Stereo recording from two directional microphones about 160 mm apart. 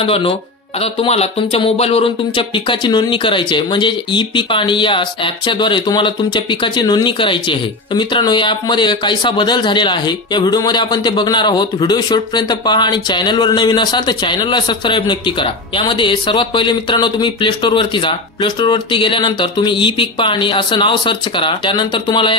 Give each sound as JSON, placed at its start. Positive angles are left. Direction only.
{"t": 0.0, "sound": "speech", "side_deg": 35}